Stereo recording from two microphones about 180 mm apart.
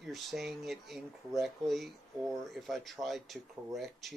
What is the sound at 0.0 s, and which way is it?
Speech, centre (ahead or behind).